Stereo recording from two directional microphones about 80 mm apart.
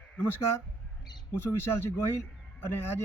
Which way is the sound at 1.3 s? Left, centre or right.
Left.